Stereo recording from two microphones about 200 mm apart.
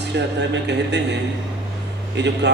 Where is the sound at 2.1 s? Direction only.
60° right (ahead or behind).